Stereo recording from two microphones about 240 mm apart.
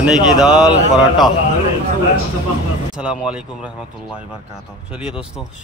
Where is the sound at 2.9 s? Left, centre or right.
Centre.